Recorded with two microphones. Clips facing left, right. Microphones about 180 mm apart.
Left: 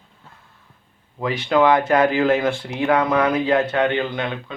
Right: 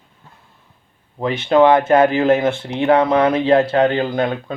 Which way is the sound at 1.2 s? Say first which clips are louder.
Right 4 dB; 25° right (ahead or behind).